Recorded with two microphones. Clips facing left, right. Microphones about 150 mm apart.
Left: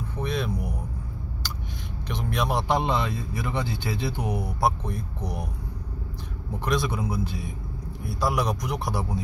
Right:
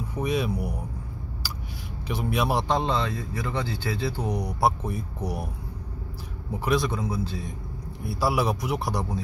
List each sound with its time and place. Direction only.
0.2 s speech: 10° right (ahead or behind)
1.4 s a sound: 5° right (ahead or behind)
2.0 s speech: 5° right (ahead or behind)
2.7 s speech: 15° left (ahead or behind)
4.4 s speech: centre (ahead or behind)
6.6 s speech: 5° right (ahead or behind)
6.9 s speech: 15° left (ahead or behind)
8.0 s speech: 5° right (ahead or behind)